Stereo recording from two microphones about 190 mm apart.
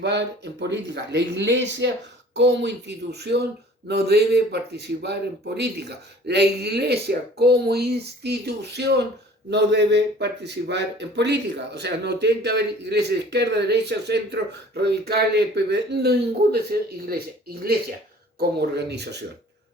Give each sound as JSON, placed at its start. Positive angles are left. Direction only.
{"t": 0.0, "sound": "a man's voice", "side_deg": -65}